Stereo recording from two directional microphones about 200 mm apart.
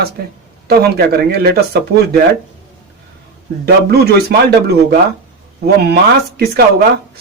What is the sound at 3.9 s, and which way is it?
Speech, 55° right (ahead or behind).